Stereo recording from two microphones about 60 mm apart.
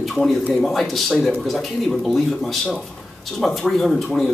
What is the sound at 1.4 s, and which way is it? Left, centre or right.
Speech, centre.